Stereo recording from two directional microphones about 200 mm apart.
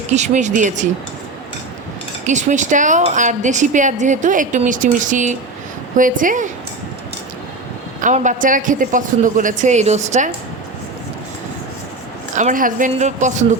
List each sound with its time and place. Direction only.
0.1 s speech: 35° right (ahead or behind)
2.2 s speech: 35° right (ahead or behind)
8.0 s speech: 40° right (ahead or behind)
12.4 s speech: 40° right (ahead or behind)